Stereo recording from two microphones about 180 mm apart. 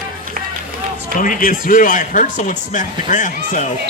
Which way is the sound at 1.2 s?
45° left (ahead or behind).